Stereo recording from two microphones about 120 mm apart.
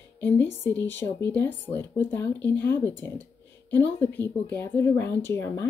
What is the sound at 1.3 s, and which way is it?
Speech, 15° left (ahead or behind).